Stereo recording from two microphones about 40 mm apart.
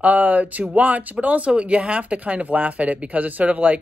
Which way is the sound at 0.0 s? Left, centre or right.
Right.